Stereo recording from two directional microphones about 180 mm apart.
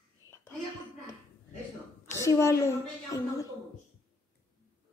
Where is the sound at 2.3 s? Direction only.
15° left (ahead or behind).